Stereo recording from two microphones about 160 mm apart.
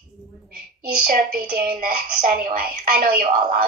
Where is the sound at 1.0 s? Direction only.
60° right (ahead or behind).